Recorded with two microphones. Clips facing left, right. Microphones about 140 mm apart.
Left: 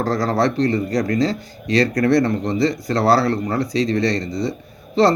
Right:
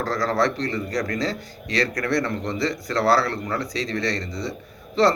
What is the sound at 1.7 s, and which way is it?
Speech, 40° left (ahead or behind).